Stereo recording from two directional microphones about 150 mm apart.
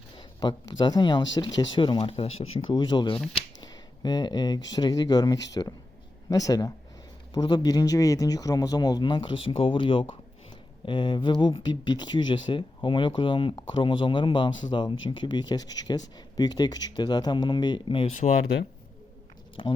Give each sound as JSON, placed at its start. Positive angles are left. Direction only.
{"t": 0.2, "sound": "speech", "side_deg": 30}
{"t": 2.7, "sound": "speech", "side_deg": 30}
{"t": 19.6, "sound": "speech", "side_deg": 35}